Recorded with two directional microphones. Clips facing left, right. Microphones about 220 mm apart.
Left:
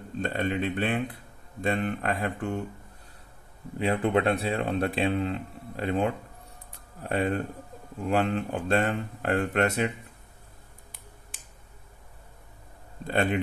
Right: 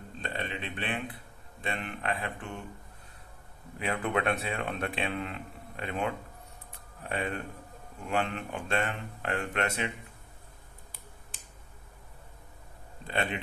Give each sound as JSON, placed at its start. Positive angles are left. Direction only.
{"t": 0.2, "sound": "speech", "side_deg": 45}
{"t": 3.7, "sound": "speech", "side_deg": 30}
{"t": 6.7, "sound": "a sound", "side_deg": 35}
{"t": 8.1, "sound": "speech", "side_deg": 35}
{"t": 13.0, "sound": "speech", "side_deg": 45}